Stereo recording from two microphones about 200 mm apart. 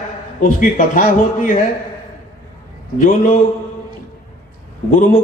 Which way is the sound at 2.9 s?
40° left (ahead or behind).